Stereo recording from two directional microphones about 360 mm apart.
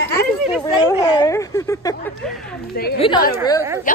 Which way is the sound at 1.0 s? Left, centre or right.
Centre.